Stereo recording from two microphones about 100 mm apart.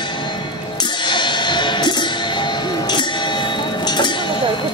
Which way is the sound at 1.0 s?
50° left (ahead or behind).